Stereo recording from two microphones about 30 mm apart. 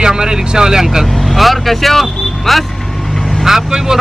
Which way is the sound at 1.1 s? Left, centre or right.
Centre.